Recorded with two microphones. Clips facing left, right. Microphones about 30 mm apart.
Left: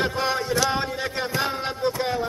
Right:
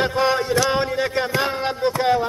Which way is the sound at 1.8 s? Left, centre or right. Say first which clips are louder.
Right 6 dB; right.